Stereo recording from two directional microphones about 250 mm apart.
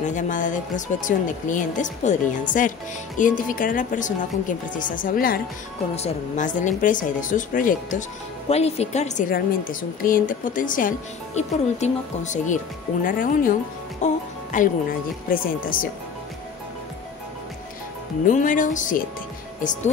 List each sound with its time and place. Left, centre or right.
0.0 s a woman's voice: left
18.2 s a woman's voice: left